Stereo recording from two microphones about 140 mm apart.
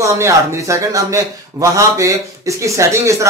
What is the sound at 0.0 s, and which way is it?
A man's voice, 20° right (ahead or behind).